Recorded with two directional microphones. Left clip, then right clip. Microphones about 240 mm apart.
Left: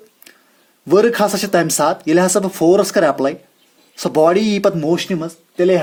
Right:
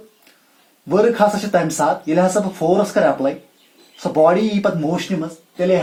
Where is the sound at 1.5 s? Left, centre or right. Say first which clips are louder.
Left 2 dB; left.